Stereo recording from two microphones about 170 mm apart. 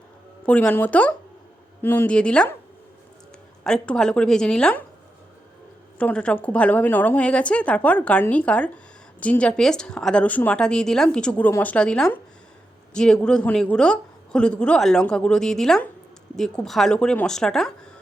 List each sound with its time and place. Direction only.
0.4 s a woman's voice: 5° left (ahead or behind)
3.6 s a woman's voice: 5° left (ahead or behind)
6.0 s a woman's voice: 5° left (ahead or behind)